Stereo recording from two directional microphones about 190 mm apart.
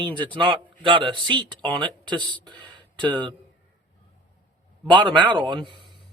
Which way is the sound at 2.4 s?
25° right (ahead or behind).